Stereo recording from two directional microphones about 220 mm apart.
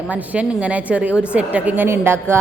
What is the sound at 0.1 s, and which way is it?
A woman's voice, 5° right (ahead or behind).